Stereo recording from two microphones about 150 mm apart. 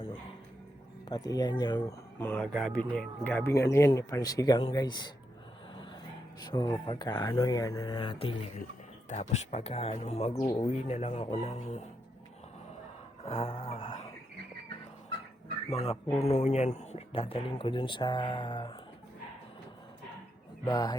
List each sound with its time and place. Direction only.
1.0 s speech: 25° left (ahead or behind)
2.1 s speech: 15° left (ahead or behind)
2.4 s speech: centre (ahead or behind); by 5.1 s 30° left (ahead or behind)
6.4 s speech: 25° left (ahead or behind)
9.0 s speech: 50° left (ahead or behind)
10.3 s speech: 25° left (ahead or behind)
10.7 s speech: 45° left (ahead or behind)
13.2 s speech: 40° left (ahead or behind)
15.7 s speech: 40° left (ahead or behind)
16.0 s speech: 20° left (ahead or behind)
16.3 s speech: 45° left (ahead or behind); by 18.7 s 30° left (ahead or behind)
20.7 s speech: 25° left (ahead or behind)